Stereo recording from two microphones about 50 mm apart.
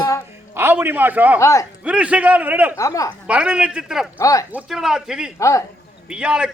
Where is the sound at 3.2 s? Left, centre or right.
Right.